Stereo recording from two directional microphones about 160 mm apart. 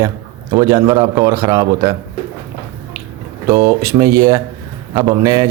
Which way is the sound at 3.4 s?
20° right (ahead or behind).